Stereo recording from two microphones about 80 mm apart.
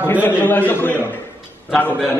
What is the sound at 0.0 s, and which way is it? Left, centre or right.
Speech, left.